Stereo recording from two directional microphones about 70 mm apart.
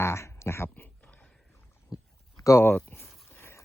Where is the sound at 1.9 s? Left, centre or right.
Left.